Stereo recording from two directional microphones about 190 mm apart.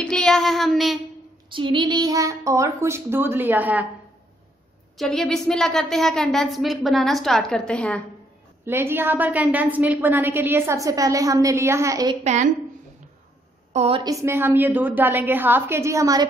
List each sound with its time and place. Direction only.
0.0 s a woman's voice: 5° left (ahead or behind)
1.5 s a woman's voice: 25° right (ahead or behind); by 3.8 s 10° right (ahead or behind)
4.9 s a woman's voice: centre (ahead or behind)
8.6 s a woman's voice: 10° right (ahead or behind)
12.2 s a woman's voice: 40° right (ahead or behind)
13.7 s a woman's voice: 30° right (ahead or behind)
14.1 s a woman's voice: 15° right (ahead or behind)